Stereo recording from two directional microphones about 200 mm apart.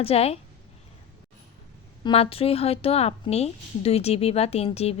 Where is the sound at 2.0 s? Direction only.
30° left (ahead or behind).